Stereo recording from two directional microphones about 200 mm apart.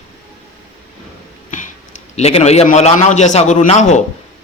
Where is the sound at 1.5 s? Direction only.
40° left (ahead or behind).